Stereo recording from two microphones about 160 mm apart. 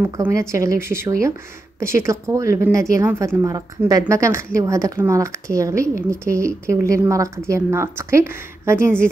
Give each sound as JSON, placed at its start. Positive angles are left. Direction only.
{"t": 0.0, "sound": "a woman's voice", "side_deg": -15}